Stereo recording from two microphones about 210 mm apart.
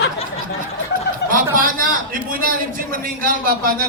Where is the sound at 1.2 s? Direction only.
55° left (ahead or behind).